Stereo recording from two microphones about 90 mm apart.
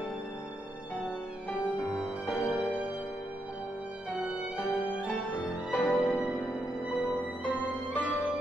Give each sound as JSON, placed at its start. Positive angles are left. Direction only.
{"t": 2.2, "sound": "music", "side_deg": 20}
{"t": 4.1, "sound": "music", "side_deg": 20}
{"t": 5.9, "sound": "music", "side_deg": 5}
{"t": 7.1, "sound": "music", "side_deg": 20}